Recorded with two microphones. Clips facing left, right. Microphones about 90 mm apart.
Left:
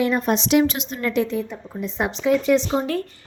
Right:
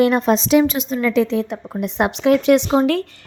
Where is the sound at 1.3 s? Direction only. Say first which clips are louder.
Right 5 dB; 80° right.